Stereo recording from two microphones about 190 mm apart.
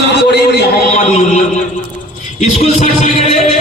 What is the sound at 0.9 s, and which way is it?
Speech, 35° left (ahead or behind).